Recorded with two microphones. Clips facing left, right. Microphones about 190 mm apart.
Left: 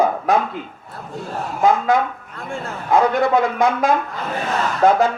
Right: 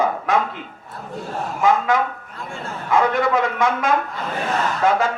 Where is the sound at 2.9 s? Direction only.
35° left (ahead or behind).